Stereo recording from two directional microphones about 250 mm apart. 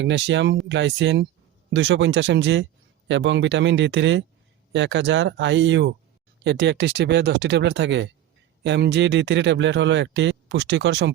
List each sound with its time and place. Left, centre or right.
0.0 s speech: right